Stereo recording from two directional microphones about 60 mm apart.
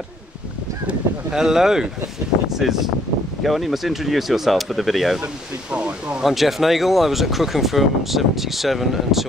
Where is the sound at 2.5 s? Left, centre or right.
Centre.